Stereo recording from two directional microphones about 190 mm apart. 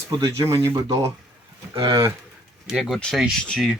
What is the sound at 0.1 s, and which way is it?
Speech, 20° right (ahead or behind).